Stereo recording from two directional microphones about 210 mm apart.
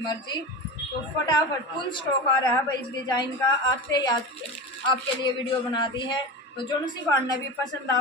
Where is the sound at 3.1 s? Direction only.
20° left (ahead or behind).